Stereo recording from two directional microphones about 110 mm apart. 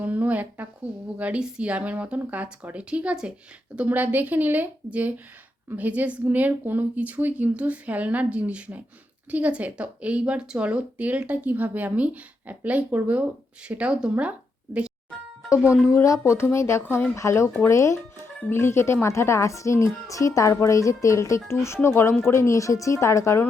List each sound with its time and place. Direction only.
0.0 s speech: 15° right (ahead or behind)
15.9 s speech: 25° left (ahead or behind)